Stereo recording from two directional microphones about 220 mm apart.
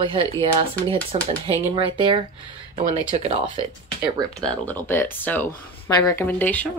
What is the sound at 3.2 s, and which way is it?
Speech, 25° right (ahead or behind).